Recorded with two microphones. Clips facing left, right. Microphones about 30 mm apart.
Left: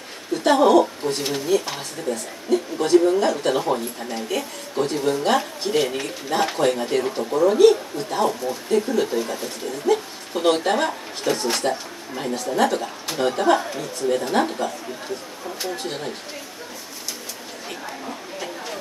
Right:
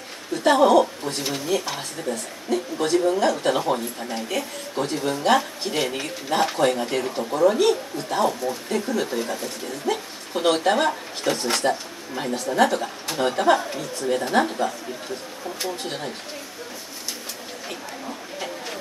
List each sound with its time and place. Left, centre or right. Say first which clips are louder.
0.5 s speech: even; centre
1.0 s speech: left 4 dB; left
2.0 s speech: left 4 dB; centre
7.0 s speech: left 2 dB; centre
7.2 s speech: left 4 dB; centre